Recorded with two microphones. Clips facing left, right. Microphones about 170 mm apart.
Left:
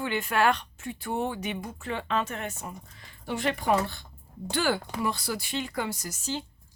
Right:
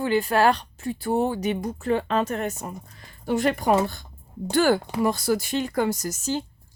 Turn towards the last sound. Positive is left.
turn(degrees=-45)  # may be behind; listen again after turning